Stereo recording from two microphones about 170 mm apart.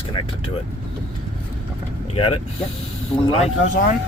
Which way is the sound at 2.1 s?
35° left (ahead or behind).